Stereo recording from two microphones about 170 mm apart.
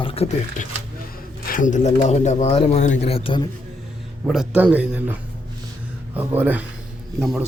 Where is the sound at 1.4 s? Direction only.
50° left (ahead or behind); by 3.4 s 35° left (ahead or behind).